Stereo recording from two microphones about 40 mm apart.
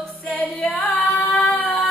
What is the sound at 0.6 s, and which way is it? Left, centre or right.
Singing, left.